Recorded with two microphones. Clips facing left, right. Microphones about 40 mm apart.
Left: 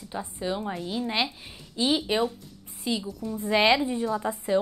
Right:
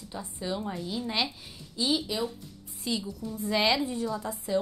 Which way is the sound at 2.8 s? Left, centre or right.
Left.